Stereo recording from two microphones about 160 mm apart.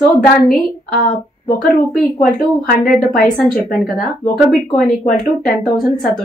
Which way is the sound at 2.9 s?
65° left (ahead or behind).